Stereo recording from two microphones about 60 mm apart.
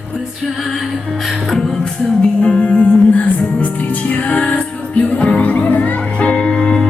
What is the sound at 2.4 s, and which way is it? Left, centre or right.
Music, centre.